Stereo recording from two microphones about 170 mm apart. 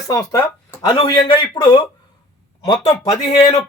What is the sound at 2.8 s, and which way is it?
Speech, 20° left (ahead or behind).